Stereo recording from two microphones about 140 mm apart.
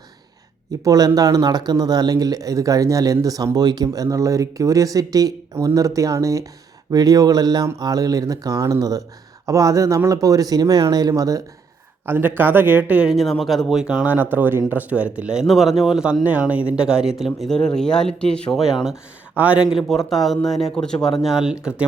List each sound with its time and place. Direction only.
0.9 s a man's voice: 25° right (ahead or behind); by 19.6 s 10° right (ahead or behind)
20.1 s speech: centre (ahead or behind)